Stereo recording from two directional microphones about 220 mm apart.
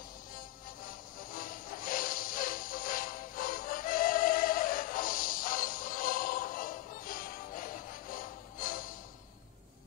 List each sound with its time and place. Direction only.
0.3 s music: 40° left (ahead or behind)